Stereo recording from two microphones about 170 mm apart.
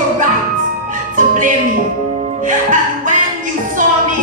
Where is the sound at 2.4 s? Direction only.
50° right (ahead or behind).